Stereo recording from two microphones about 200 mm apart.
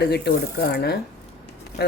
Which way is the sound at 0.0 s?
55° left (ahead or behind).